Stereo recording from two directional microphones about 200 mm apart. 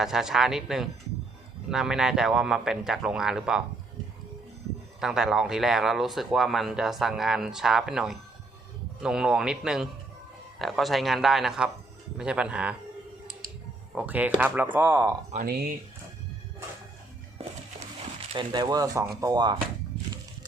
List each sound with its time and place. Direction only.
0.0 s speech: centre (ahead or behind)
4.9 s speech: centre (ahead or behind)
13.9 s speech: 10° right (ahead or behind)
15.4 s speech: 50° right (ahead or behind)
17.3 s a sound: 30° right (ahead or behind)
18.5 s speech: 20° right (ahead or behind)